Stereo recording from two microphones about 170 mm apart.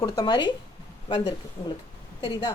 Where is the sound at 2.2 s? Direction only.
25° left (ahead or behind).